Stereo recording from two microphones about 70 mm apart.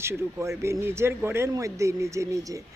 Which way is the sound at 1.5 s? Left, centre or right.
Right.